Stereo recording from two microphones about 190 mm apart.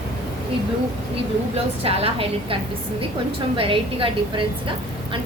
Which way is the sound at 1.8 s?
30° right (ahead or behind).